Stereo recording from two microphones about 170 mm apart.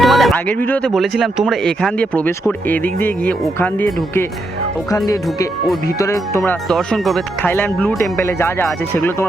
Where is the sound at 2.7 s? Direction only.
10° left (ahead or behind).